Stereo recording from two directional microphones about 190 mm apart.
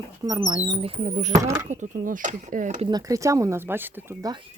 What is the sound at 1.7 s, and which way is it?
Speech, 45° right (ahead or behind).